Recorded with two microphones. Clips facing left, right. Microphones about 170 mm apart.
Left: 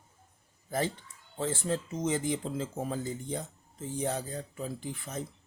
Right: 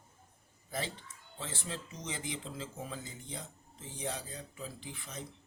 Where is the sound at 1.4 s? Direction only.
45° left (ahead or behind).